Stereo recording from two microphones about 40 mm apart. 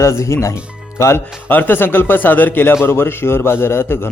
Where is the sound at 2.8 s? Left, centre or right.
Left.